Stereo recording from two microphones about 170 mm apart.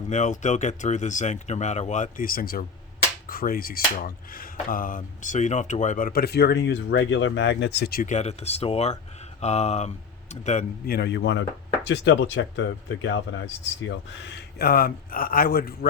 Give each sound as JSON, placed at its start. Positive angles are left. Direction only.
{"t": 0.1, "sound": "speech", "side_deg": 45}
{"t": 8.0, "sound": "speech", "side_deg": 40}
{"t": 10.8, "sound": "a man's voice", "side_deg": 70}